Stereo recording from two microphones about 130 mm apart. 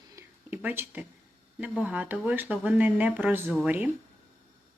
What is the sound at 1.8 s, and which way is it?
Speech, 10° right (ahead or behind).